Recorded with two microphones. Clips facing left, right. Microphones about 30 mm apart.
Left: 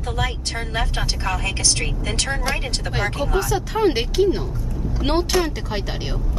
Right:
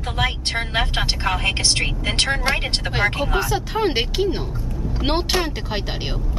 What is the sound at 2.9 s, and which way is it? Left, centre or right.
Speech, right.